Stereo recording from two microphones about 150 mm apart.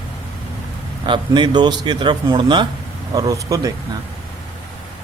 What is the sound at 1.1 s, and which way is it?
A man's voice, 30° right (ahead or behind).